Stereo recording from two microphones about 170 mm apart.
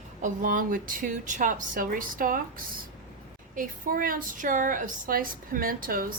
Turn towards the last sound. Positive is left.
turn(degrees=-55)  # may be behind; listen again after turning